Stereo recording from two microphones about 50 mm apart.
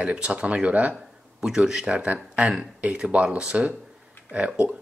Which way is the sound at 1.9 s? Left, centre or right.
Right.